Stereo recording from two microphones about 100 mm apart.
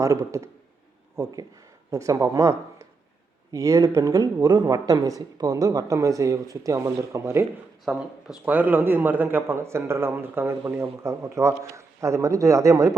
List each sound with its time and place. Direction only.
0.0 s speech: 30° right (ahead or behind)
7.9 s speech: 10° right (ahead or behind); by 13.0 s 35° right (ahead or behind)